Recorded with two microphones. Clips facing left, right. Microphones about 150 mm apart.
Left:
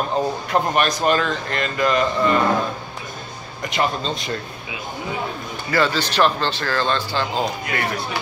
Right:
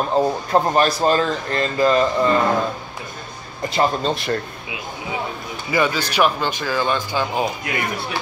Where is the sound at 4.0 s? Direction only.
60° right (ahead or behind).